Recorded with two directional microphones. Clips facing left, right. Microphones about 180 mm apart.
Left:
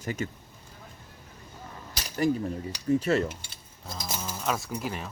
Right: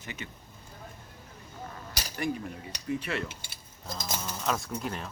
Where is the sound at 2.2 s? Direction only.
40° left (ahead or behind).